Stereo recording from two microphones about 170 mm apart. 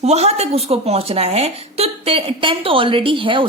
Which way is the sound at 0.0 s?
40° right (ahead or behind).